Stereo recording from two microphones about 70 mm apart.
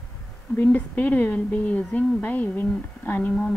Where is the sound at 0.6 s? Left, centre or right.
Left.